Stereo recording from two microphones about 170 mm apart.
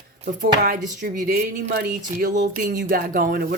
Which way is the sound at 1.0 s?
60° right (ahead or behind).